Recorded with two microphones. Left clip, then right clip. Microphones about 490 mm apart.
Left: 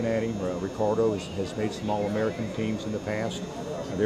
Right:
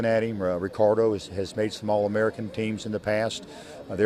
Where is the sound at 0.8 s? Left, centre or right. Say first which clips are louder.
Right 4 dB; right.